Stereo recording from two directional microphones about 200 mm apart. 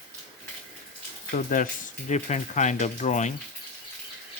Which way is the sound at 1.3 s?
45° left (ahead or behind).